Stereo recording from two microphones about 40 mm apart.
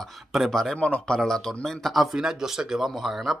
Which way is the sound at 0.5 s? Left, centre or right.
Centre.